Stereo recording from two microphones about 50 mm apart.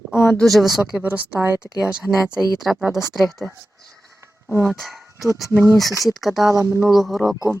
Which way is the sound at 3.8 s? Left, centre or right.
Centre.